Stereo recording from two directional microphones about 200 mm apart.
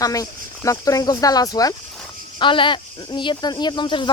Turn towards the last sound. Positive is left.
turn(degrees=25)  # may be behind; listen again after turning